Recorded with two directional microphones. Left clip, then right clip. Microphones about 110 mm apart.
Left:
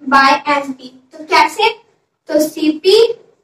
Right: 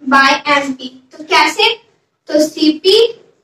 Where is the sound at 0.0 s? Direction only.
25° right (ahead or behind).